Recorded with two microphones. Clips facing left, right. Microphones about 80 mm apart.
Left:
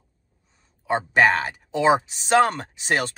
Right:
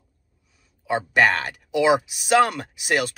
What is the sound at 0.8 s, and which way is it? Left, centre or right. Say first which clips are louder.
Speech: left 1 dB; left.